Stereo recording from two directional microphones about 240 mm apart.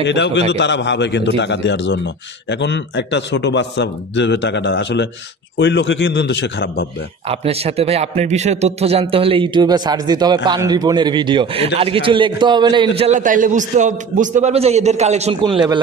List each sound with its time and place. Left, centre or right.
0.0 s a man's voice: left
7.2 s a man's voice: right